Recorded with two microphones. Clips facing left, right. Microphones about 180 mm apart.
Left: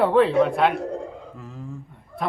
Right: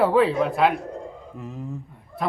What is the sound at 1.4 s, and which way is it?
Speech, 20° right (ahead or behind).